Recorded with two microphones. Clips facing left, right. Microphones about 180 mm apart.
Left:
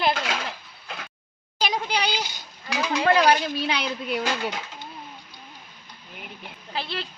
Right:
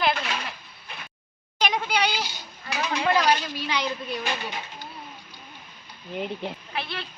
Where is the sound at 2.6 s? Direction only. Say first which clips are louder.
Left 3 dB; 80° left.